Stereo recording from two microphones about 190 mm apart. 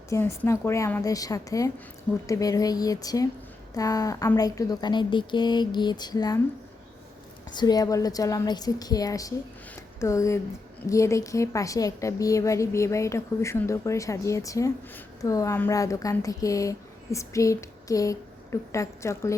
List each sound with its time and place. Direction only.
0.1 s a woman's voice: 15° left (ahead or behind)
7.5 s a woman's voice: 20° left (ahead or behind)